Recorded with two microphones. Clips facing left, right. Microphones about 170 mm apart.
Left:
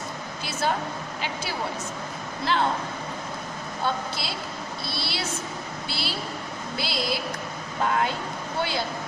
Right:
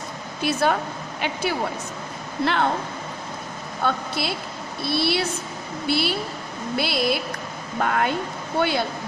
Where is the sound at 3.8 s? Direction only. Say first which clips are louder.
Right 4 dB; 60° right (ahead or behind).